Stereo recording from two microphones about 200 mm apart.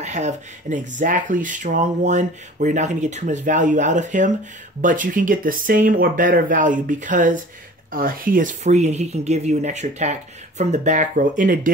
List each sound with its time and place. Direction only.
0.0 s speech: 35° right (ahead or behind)